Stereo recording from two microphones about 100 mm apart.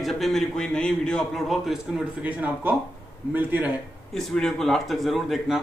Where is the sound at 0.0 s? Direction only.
Centre (ahead or behind).